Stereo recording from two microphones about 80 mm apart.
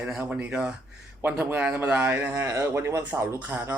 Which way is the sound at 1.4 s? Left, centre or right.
Right.